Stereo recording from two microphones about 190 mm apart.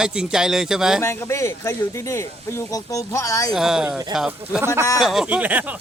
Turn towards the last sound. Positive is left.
turn(degrees=-10)  # may be behind; listen again after turning